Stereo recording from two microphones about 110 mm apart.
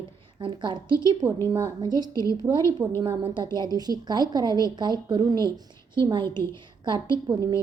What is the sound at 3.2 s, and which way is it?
Speech, 45° right (ahead or behind).